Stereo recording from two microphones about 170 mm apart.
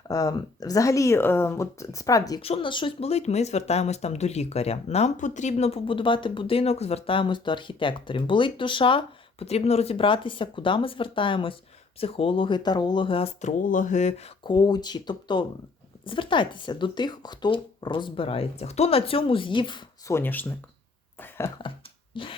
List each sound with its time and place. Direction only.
0.1 s speech: 20° left (ahead or behind)
2.4 s speech: 35° left (ahead or behind)
13.6 s speech: 50° left (ahead or behind)
14.5 s speech: 25° left (ahead or behind)
20.1 s speech: 15° left (ahead or behind)
21.2 s a sound: 15° left (ahead or behind)
22.1 s a sound: 30° left (ahead or behind)